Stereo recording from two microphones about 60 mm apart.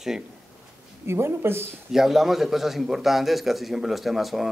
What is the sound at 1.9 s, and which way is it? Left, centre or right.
Speech, centre.